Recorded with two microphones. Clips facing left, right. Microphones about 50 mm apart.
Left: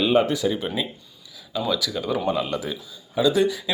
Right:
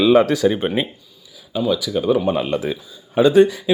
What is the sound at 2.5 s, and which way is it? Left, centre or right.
Speech, right.